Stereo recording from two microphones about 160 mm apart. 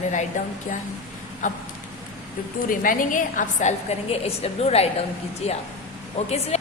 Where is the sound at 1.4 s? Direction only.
50° left (ahead or behind).